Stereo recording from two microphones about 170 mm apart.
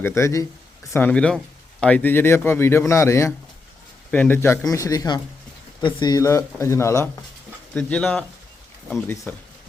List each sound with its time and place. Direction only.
0.0 s speech: 15° left (ahead or behind)
9.3 s speech: 10° left (ahead or behind)